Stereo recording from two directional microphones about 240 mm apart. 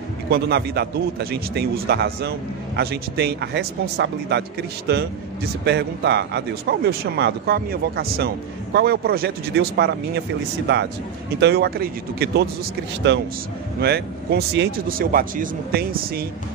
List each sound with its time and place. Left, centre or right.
0.3 s a man's voice: right
11.3 s a man's voice: right